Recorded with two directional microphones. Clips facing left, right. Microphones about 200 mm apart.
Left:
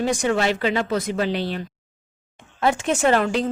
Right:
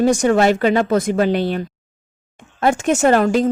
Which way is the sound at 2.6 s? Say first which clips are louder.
Right 4 dB; 45° right (ahead or behind).